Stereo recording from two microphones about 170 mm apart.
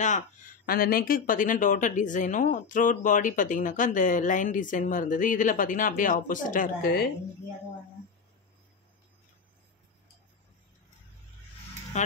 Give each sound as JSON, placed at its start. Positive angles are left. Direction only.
{"t": 0.7, "sound": "speech", "side_deg": 60}